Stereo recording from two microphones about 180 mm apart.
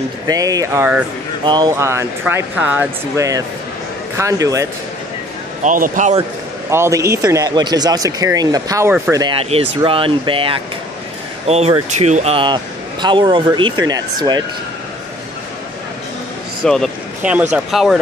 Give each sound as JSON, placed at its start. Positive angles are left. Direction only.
{"t": 0.3, "sound": "speech", "side_deg": -20}
{"t": 5.6, "sound": "speech", "side_deg": -45}
{"t": 6.7, "sound": "speech", "side_deg": -15}
{"t": 16.6, "sound": "speech", "side_deg": 5}
{"t": 17.2, "sound": "speech", "side_deg": -10}